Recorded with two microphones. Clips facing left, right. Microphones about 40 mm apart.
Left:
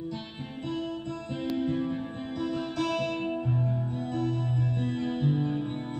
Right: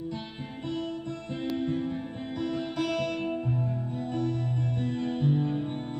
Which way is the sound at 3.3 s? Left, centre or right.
Centre.